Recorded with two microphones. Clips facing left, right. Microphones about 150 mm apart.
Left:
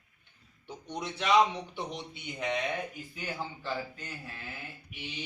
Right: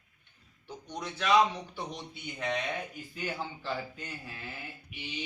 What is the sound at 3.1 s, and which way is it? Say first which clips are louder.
Speech: right 3 dB; centre (ahead or behind).